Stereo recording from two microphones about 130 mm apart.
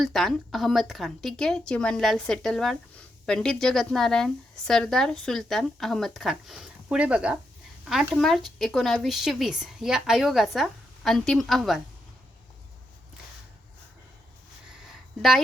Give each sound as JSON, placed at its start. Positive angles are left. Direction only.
{"t": 0.0, "sound": "speech", "side_deg": 0}